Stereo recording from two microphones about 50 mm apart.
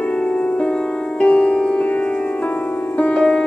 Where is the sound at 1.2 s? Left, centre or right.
Left.